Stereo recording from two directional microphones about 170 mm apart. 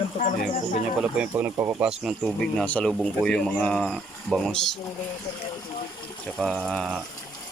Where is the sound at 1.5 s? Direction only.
20° right (ahead or behind).